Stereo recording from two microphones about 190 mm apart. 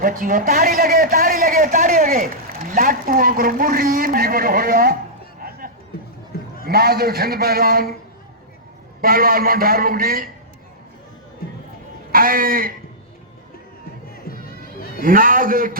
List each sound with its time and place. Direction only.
0.0 s a man's voice: 45° right (ahead or behind)
5.4 s a sound: 50° right (ahead or behind)
6.7 s a man's voice: 55° right (ahead or behind)
9.0 s a man's voice: 50° right (ahead or behind)
12.1 s a sound: 50° right (ahead or behind)
14.1 s music: 50° left (ahead or behind)
15.0 s a man's voice: 45° right (ahead or behind)